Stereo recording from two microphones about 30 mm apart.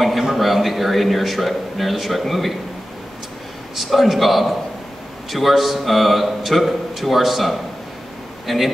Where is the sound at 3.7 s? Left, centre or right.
Centre.